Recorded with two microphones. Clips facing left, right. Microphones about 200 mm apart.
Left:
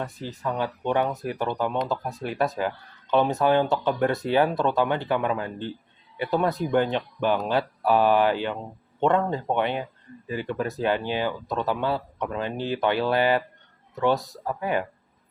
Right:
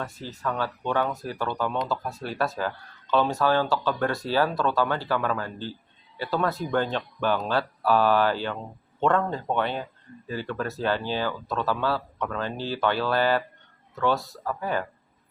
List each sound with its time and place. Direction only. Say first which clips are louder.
0.0 s speech: left 1 dB; 15° left (ahead or behind)